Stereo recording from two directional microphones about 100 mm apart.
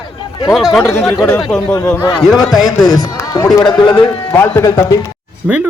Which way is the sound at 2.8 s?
40° left (ahead or behind).